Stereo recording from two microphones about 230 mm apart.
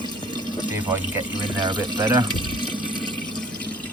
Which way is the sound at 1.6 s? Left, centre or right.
Centre.